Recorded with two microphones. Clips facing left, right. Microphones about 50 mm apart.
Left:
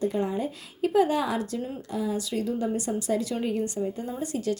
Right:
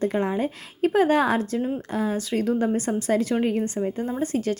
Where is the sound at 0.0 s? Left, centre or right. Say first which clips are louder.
Right 3 dB; right.